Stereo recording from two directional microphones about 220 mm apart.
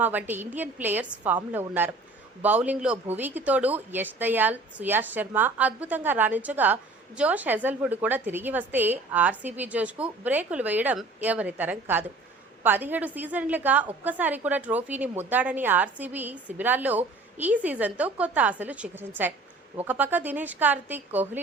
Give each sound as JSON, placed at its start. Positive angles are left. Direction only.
{"t": 0.0, "sound": "a woman's voice", "side_deg": -10}